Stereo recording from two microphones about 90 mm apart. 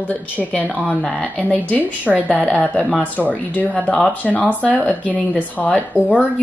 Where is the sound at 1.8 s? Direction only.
15° right (ahead or behind).